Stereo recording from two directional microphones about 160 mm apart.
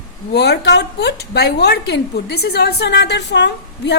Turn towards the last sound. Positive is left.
turn(degrees=90)